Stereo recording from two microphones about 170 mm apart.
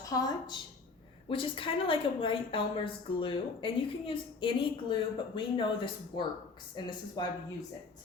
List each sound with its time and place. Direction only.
0.1 s a woman's voice: 20° left (ahead or behind)